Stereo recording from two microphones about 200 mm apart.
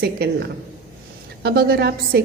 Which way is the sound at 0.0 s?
55° right (ahead or behind).